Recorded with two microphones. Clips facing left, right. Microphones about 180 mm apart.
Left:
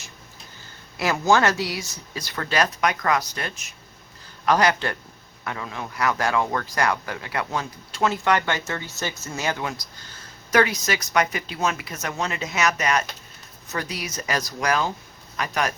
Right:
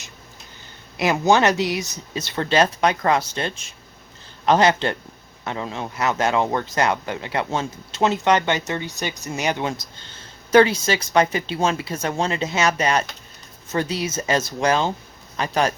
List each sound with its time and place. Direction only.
0.9 s speech: 20° right (ahead or behind)